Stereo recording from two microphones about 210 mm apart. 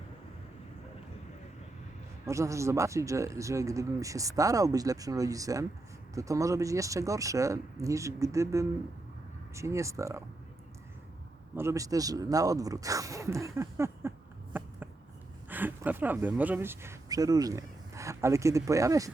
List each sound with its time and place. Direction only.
2.2 s speech: 15° right (ahead or behind)
11.5 s speech: 15° right (ahead or behind)
15.4 s speech: 10° right (ahead or behind)